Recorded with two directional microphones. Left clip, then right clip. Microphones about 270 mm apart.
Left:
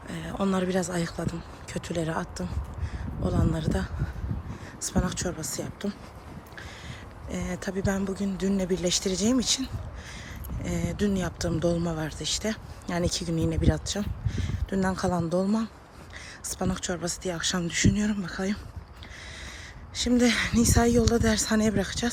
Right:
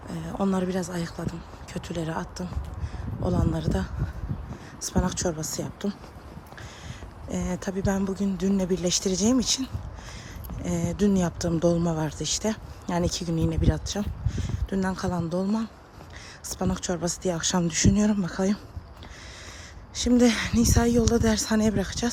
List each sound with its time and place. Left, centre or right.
0.1 s speech: centre
7.3 s speech: centre
19.9 s speech: centre